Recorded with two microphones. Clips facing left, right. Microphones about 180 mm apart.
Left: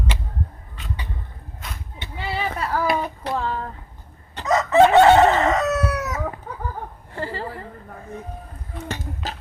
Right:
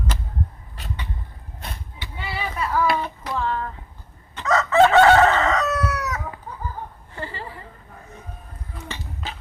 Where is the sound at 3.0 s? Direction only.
40° left (ahead or behind).